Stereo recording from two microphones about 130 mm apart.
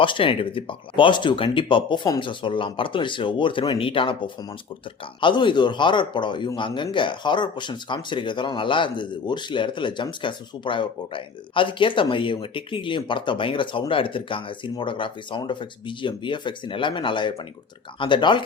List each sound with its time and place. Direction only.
0.0 s speech: 40° left (ahead or behind)